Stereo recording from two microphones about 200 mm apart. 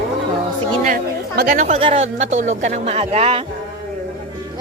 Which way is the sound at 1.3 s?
50° right (ahead or behind).